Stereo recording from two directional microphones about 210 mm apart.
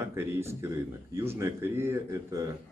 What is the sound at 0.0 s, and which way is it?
A man's voice, 10° right (ahead or behind).